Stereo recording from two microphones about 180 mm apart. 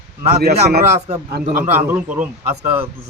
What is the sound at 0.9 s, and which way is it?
Speech, 40° right (ahead or behind).